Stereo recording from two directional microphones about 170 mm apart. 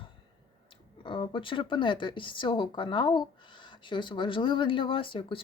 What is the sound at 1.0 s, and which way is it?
Speech, 30° left (ahead or behind).